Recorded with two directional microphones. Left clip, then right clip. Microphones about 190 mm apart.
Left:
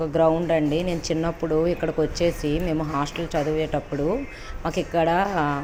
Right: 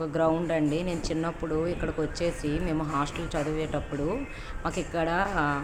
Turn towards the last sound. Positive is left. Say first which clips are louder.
# left 5 dB
turn(degrees=15)  # may be behind; listen again after turning